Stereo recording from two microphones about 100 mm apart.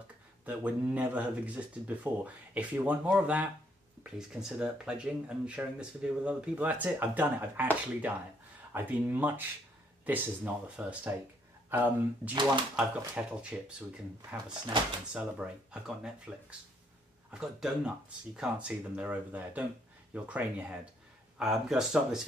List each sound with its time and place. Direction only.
0.5 s speech: 15° right (ahead or behind)
15.1 s speech: 10° right (ahead or behind)